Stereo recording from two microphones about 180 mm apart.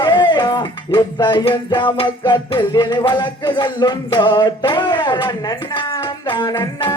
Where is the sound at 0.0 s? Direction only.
25° left (ahead or behind).